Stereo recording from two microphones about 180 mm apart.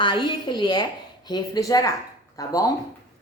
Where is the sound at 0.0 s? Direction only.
25° left (ahead or behind).